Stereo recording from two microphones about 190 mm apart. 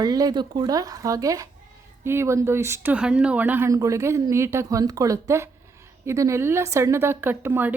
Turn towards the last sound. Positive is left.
turn(degrees=-10)  # may be behind; listen again after turning